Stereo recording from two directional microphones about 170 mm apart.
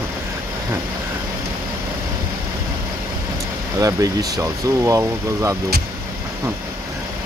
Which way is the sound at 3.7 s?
20° right (ahead or behind).